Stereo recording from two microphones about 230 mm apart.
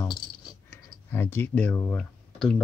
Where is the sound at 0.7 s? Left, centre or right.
Centre.